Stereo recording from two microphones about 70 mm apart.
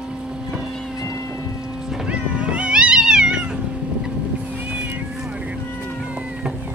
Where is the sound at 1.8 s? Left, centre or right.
Centre.